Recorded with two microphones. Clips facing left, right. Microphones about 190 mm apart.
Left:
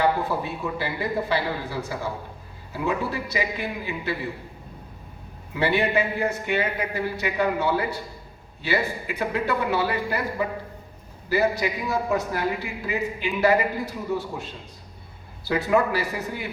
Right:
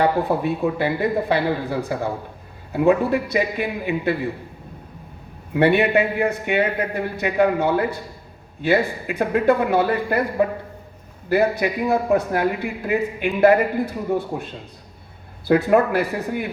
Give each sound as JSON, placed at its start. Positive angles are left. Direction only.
{"t": 0.3, "sound": "a man's voice", "side_deg": -60}
{"t": 5.5, "sound": "a man's voice", "side_deg": -60}